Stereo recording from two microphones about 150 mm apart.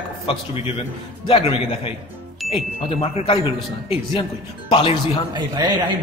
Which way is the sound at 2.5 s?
40° left (ahead or behind).